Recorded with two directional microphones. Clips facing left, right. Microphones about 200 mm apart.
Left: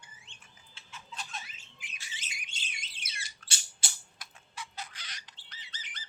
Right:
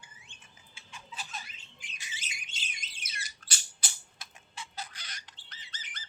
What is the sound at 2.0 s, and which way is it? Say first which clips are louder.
Squawk: right 2 dB; 15° right (ahead or behind).